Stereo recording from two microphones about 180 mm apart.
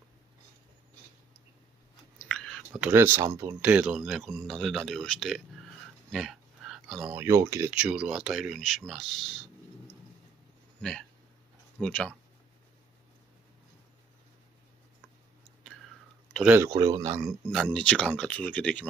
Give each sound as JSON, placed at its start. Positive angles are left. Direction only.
{"t": 2.2, "sound": "chewing", "side_deg": 5}
{"t": 2.7, "sound": "speech", "side_deg": -10}
{"t": 6.1, "sound": "a sound", "side_deg": 0}
{"t": 7.2, "sound": "speech", "side_deg": -15}
{"t": 7.7, "sound": "speech", "side_deg": -5}
{"t": 10.8, "sound": "speech", "side_deg": 5}
{"t": 16.3, "sound": "speech", "side_deg": -10}
{"t": 17.2, "sound": "speech", "side_deg": 0}